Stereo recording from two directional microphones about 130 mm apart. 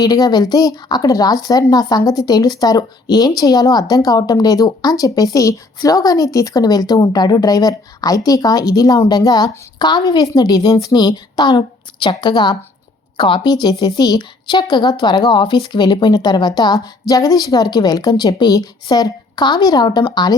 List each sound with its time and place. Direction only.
0.0 s a woman's voice: 30° left (ahead or behind)